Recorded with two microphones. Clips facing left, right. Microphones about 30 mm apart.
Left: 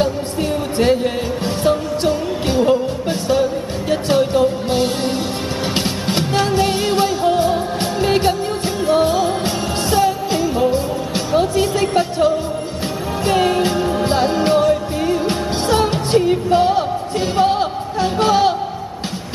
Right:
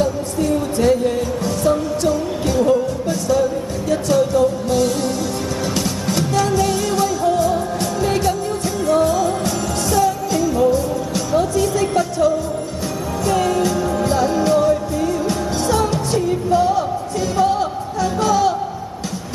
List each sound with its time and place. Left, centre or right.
0.0 s music: left